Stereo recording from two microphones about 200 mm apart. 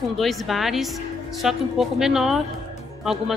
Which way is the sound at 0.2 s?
Centre (ahead or behind).